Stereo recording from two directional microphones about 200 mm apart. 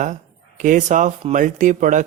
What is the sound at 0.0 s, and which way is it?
Speech, 40° right (ahead or behind).